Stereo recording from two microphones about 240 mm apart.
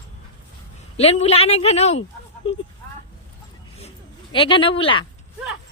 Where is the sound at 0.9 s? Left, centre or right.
Left.